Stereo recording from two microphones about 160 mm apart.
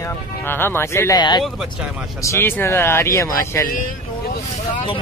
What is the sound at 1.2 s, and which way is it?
Speech, 25° left (ahead or behind).